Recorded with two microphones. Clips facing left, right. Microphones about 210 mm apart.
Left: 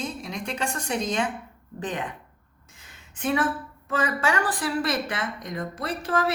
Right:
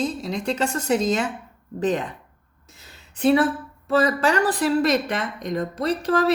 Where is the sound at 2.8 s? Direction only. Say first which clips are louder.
Right 9 dB; 35° right (ahead or behind).